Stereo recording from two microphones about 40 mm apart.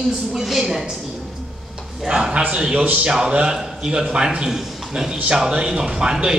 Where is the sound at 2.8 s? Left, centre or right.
Right.